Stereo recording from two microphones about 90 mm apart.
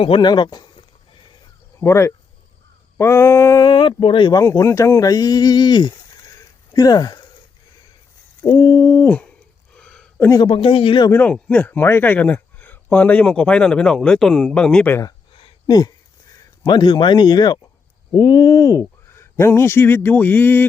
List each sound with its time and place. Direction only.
0.2 s speech: 55° left (ahead or behind)
1.8 s speech: 35° left (ahead or behind)
3.6 s speech: 65° left (ahead or behind)
4.4 s speech: 35° left (ahead or behind)
8.5 s speech: 50° left (ahead or behind)
8.8 s speech: 30° left (ahead or behind)
9.0 s hoot: 15° left (ahead or behind)
9.7 s a sound: 10° left (ahead or behind)
10.4 s speech: 85° left
11.1 s a man's voice: 20° left (ahead or behind)
15.3 s a sound: 70° left (ahead or behind)
15.6 s speech: 45° left (ahead or behind)
16.6 s speech: 60° left (ahead or behind); by 20.7 s 20° left (ahead or behind)